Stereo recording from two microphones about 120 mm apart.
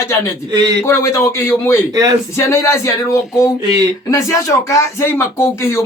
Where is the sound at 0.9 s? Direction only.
25° left (ahead or behind).